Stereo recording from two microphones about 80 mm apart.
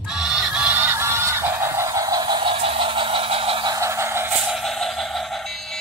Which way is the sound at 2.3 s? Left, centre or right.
Right.